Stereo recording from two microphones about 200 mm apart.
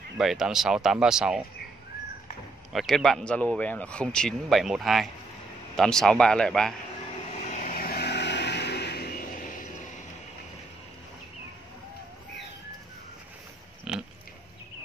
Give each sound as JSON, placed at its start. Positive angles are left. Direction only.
{"t": 0.2, "sound": "speech", "side_deg": 0}
{"t": 2.7, "sound": "speech", "side_deg": 0}
{"t": 7.1, "sound": "vehicle", "side_deg": 30}
{"t": 13.9, "sound": "pig", "side_deg": -5}